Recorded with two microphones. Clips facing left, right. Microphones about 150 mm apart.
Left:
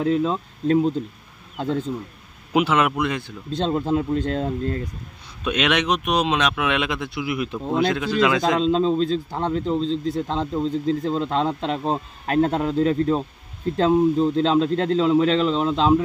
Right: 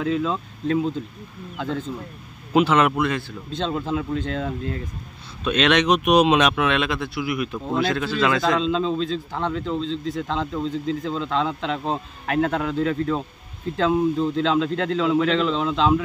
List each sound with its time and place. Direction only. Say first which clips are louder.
0.0 s a man's voice: left 2 dB; 30° left (ahead or behind)
2.5 s speech: right 2 dB; 10° left (ahead or behind)
3.6 s a man's voice: left 3 dB; 35° left (ahead or behind)
5.4 s speech: right 2 dB; 10° left (ahead or behind)
5.9 s speech: right 5 dB; 10° right (ahead or behind)
6.5 s speech: right 1 dB; 10° left (ahead or behind)
8.5 s a man's voice: left 3 dB; 35° left (ahead or behind)